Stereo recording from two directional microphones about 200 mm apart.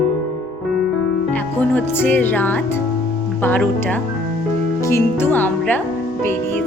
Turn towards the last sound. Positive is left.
turn(degrees=10)  # may be behind; listen again after turning